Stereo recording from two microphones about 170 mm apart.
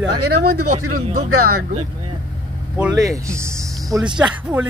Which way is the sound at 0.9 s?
50° right (ahead or behind).